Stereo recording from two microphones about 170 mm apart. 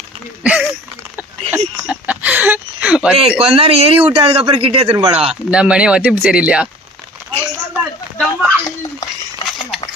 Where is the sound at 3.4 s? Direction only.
35° right (ahead or behind).